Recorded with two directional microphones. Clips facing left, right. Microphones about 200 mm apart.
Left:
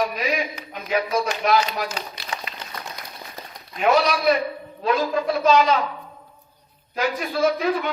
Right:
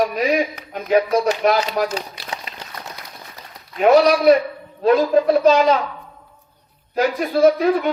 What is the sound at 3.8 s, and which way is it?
A woman's voice, 40° right (ahead or behind).